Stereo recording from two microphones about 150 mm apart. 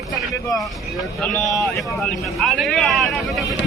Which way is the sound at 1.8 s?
Centre (ahead or behind).